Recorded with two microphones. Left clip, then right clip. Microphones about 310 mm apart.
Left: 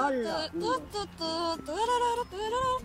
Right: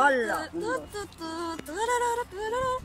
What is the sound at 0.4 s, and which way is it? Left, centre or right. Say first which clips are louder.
Speech: even; centre.